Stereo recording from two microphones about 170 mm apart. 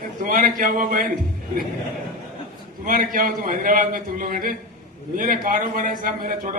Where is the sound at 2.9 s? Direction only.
55° right (ahead or behind).